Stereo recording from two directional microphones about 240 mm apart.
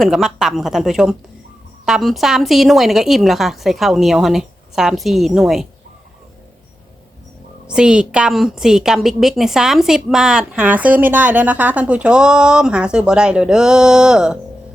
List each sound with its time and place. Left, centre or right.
0.0 s a woman's voice: centre
7.7 s a woman's voice: centre